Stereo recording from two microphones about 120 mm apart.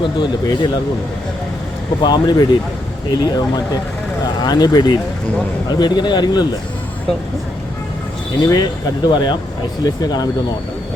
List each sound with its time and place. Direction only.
0.0 s speech: 40° left (ahead or behind)
2.0 s speech: 40° left (ahead or behind)
8.4 s speech: 35° left (ahead or behind)